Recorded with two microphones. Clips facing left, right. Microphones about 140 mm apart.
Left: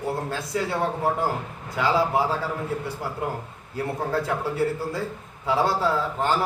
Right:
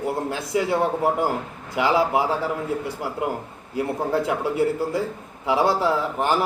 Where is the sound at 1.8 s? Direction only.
15° right (ahead or behind).